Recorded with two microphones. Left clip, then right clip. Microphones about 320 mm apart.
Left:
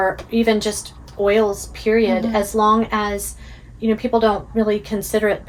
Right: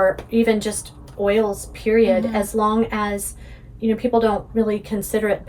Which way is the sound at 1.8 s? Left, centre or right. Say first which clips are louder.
Right 1 dB; centre.